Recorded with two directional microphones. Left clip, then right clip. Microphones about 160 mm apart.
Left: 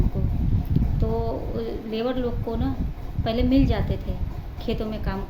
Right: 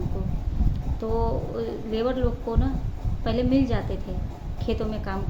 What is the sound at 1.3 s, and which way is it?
A woman's voice, 15° left (ahead or behind).